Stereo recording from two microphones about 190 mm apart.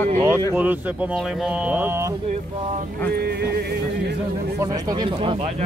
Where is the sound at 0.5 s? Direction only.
10° right (ahead or behind).